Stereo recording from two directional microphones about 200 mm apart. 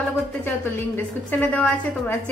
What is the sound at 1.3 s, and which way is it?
Speech, 5° left (ahead or behind).